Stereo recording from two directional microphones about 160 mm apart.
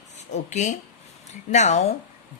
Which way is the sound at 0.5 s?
50° left (ahead or behind).